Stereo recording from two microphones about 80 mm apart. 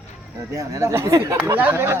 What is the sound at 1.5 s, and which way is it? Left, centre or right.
Speech, right.